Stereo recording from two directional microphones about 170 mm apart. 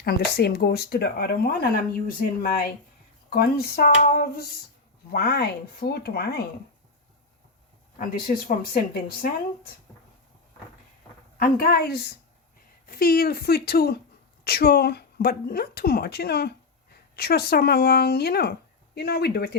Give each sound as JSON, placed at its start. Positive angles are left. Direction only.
{"t": 0.0, "sound": "speech", "side_deg": 65}
{"t": 7.9, "sound": "speech", "side_deg": 55}
{"t": 11.5, "sound": "speech", "side_deg": 65}